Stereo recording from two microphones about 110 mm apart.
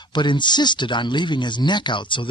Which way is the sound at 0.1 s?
45° left (ahead or behind).